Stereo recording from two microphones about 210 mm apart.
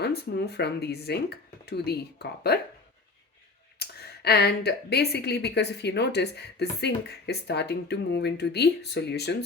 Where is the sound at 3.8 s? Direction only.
50° left (ahead or behind).